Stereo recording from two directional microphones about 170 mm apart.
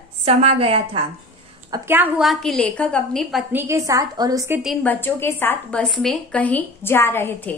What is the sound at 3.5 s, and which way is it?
A woman's voice, 15° right (ahead or behind).